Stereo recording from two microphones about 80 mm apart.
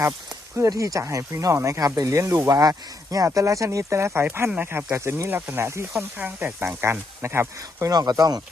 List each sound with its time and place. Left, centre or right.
0.8 s speech: right
4.9 s speech: right
6.1 s speech: right
7.9 s speech: right